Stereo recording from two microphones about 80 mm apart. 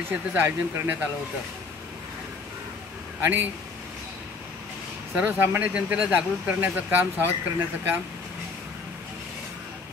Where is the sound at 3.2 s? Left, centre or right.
Right.